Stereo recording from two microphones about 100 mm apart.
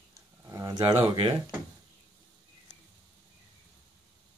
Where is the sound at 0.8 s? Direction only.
20° right (ahead or behind).